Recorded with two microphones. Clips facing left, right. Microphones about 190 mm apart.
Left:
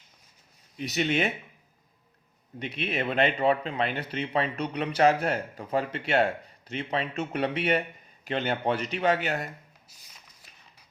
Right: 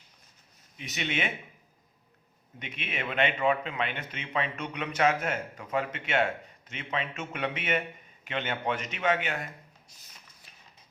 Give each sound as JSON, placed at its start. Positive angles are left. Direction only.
{"t": 0.8, "sound": "speech", "side_deg": 40}
{"t": 2.6, "sound": "speech", "side_deg": 35}